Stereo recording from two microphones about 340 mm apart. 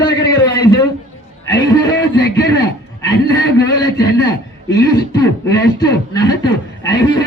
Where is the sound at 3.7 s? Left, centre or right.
Centre.